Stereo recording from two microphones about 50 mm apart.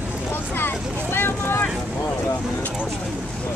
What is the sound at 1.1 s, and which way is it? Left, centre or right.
Speech, left.